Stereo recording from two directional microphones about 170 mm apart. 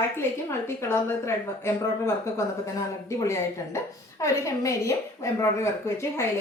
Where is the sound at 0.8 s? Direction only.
15° left (ahead or behind).